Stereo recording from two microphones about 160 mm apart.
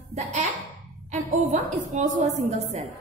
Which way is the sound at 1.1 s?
50° right (ahead or behind).